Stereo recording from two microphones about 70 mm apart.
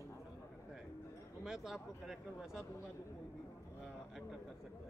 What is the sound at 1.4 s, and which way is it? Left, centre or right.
Speech, centre.